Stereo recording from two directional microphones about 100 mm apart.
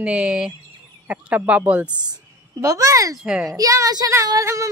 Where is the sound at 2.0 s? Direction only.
35° right (ahead or behind).